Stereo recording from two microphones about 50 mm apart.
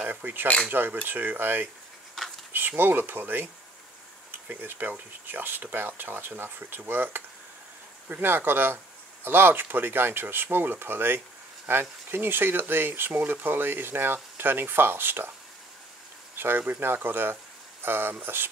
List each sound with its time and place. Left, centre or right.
0.1 s speech: right
16.3 s speech: right